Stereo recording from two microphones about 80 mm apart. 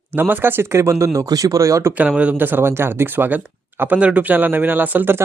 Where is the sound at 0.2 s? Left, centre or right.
Right.